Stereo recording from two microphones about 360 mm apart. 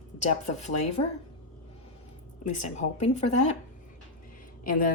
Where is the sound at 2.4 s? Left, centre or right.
Centre.